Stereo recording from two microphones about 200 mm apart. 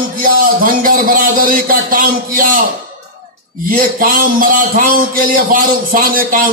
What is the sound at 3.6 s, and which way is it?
A man's voice, 45° right (ahead or behind).